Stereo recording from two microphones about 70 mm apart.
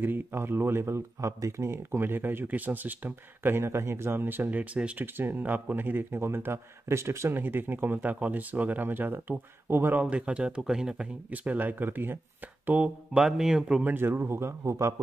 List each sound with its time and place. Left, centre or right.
0.0 s speech: right
5.0 s speech: right
9.9 s speech: centre
11.2 s speech: right
12.6 s speech: centre
13.1 s speech: centre
13.8 s speech: right